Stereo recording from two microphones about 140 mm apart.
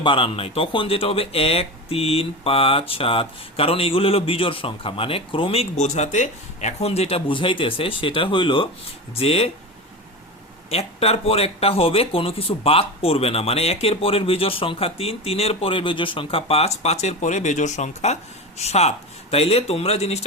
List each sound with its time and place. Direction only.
0.0 s speech: 40° left (ahead or behind)
10.7 s speech: 45° left (ahead or behind)